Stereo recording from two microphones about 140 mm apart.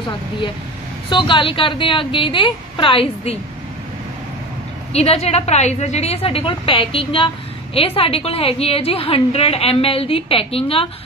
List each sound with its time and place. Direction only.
1.1 s a woman's voice: 35° left (ahead or behind)
4.9 s a woman's voice: 50° left (ahead or behind)